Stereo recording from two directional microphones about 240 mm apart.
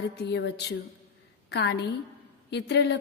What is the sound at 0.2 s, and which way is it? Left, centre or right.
A woman's voice, left.